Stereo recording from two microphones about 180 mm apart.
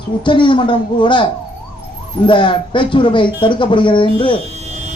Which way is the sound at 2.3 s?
25° left (ahead or behind).